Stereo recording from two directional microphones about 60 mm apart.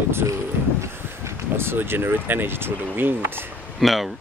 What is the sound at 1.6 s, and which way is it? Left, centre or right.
Speech, right.